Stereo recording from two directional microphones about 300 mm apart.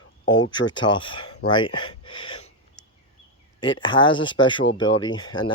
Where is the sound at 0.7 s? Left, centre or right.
Centre.